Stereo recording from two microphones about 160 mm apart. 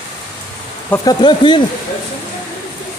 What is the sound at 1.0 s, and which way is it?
Speech, 25° left (ahead or behind).